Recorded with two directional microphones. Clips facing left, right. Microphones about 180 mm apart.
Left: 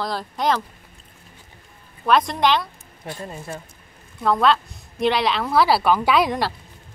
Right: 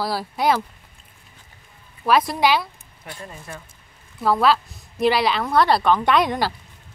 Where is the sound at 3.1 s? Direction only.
30° left (ahead or behind).